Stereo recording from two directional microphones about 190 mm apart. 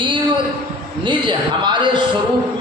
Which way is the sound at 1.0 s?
25° right (ahead or behind).